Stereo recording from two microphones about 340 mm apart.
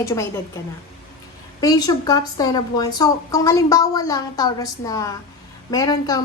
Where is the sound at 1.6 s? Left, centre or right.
Centre.